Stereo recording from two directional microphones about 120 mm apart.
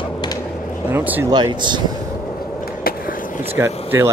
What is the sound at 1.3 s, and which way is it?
Speech, 40° right (ahead or behind).